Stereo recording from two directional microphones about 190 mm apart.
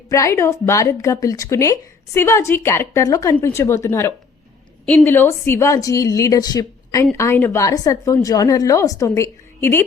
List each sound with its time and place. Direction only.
0.1 s speech: 15° left (ahead or behind)